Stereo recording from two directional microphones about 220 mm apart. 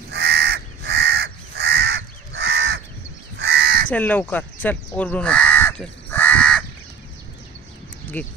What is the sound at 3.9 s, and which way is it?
Speech, 10° left (ahead or behind).